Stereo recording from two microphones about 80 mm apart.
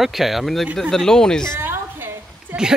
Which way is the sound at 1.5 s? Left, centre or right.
Right.